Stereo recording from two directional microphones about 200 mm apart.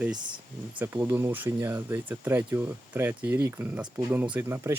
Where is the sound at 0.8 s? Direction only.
10° right (ahead or behind).